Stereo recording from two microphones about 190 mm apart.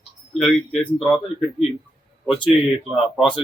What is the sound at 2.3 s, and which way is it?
Speech, 25° left (ahead or behind).